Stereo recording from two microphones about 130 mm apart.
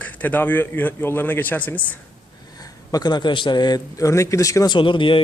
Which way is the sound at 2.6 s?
30° left (ahead or behind).